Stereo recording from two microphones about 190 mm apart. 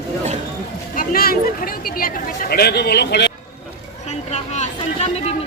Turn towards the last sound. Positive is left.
turn(degrees=35)  # may be behind; listen again after turning